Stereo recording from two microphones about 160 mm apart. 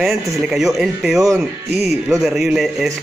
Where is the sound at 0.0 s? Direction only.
Centre (ahead or behind).